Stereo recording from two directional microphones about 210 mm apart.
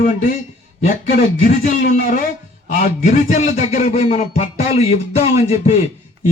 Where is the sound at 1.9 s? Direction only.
40° left (ahead or behind).